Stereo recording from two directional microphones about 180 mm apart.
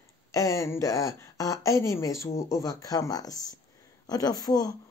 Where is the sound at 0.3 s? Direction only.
15° left (ahead or behind).